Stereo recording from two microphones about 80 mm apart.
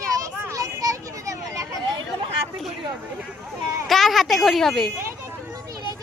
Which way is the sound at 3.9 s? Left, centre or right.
Centre.